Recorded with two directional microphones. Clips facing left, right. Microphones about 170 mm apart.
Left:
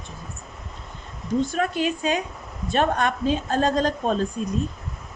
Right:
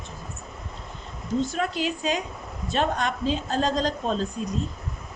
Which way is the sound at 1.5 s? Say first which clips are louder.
Left 3 dB; 55° left (ahead or behind).